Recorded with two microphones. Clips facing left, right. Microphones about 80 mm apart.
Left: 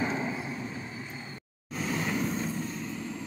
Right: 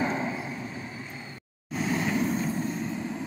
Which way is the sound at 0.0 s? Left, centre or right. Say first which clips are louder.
Right 2 dB; centre.